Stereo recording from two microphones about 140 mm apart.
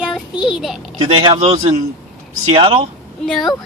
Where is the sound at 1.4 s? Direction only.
50° right (ahead or behind).